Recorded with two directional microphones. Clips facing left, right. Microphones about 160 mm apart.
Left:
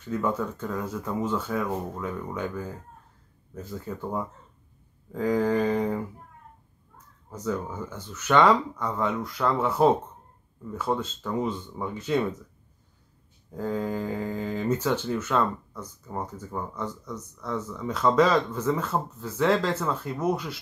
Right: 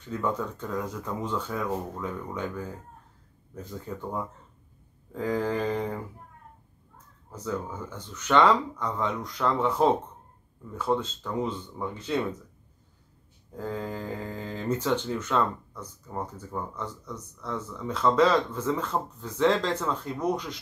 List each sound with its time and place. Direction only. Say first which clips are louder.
0.1 s speech: left 2 dB; 5° left (ahead or behind)
7.4 s speech: left 2 dB; 10° left (ahead or behind)
13.6 s speech: left 4 dB; 10° left (ahead or behind)